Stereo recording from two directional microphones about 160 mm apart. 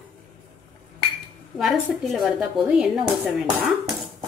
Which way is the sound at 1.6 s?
Centre (ahead or behind).